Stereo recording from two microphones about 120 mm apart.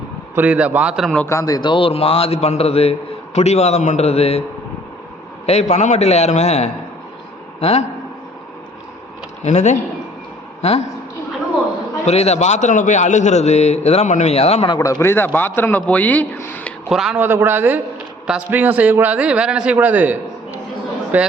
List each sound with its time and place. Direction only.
0.3 s a man's voice: 15° right (ahead or behind)
1.3 s a man's voice: 25° left (ahead or behind); by 4.4 s 60° left (ahead or behind)
5.5 s a man's voice: 70° left (ahead or behind)
9.4 s a man's voice: 70° left (ahead or behind)
10.6 s speech: 60° left (ahead or behind)
12.0 s a man's voice: 60° left (ahead or behind)
15.0 s a man's voice: 20° left (ahead or behind)
16.9 s a man's voice: 5° right (ahead or behind)
17.2 s a man's voice: 15° right (ahead or behind)